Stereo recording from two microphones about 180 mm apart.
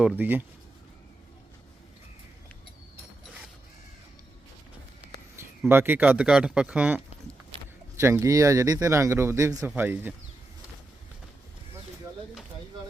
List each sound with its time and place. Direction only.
0.0 s speech: 5° right (ahead or behind)
5.4 s speech: 10° right (ahead or behind)